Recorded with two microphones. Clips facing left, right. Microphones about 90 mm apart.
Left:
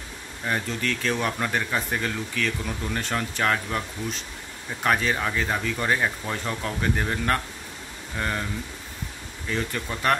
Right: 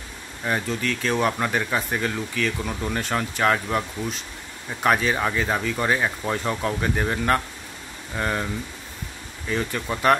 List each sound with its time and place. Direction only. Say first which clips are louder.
0.5 s speech: right 2 dB; 5° right (ahead or behind)
4.8 s speech: right 3 dB; 5° right (ahead or behind)
9.5 s speech: right 3 dB; 5° right (ahead or behind)